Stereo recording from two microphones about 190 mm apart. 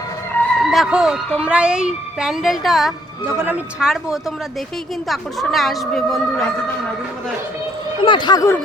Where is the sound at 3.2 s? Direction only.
10° right (ahead or behind).